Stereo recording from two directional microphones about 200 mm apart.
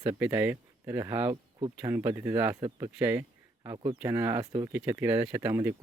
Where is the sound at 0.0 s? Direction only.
10° right (ahead or behind).